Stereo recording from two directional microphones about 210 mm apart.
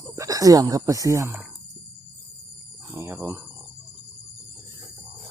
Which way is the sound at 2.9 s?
10° right (ahead or behind).